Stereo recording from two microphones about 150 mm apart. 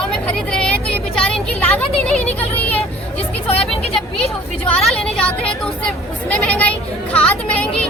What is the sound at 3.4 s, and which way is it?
Speech, 40° left (ahead or behind).